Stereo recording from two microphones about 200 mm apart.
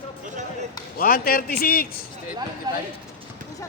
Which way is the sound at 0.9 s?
45° left (ahead or behind).